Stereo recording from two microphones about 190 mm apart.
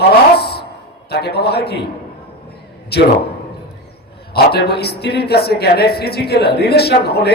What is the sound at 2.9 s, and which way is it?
Speech, 60° left (ahead or behind).